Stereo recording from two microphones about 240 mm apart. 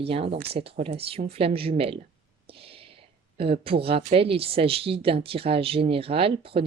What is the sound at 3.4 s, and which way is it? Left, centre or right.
Speech, right.